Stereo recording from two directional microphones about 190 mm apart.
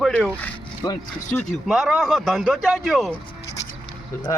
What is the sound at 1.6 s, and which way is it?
Speech, centre (ahead or behind).